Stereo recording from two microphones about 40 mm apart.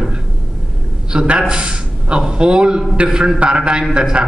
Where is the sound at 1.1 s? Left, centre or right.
Right.